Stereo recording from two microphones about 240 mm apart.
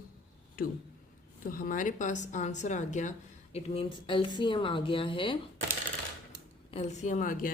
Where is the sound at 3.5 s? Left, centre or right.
Left.